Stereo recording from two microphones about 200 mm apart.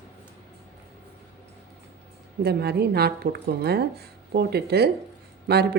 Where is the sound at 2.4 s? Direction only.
55° right (ahead or behind).